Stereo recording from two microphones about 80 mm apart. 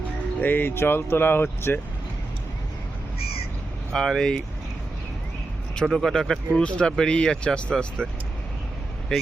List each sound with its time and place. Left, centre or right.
0.4 s speech: left
3.9 s speech: centre
5.8 s speech: centre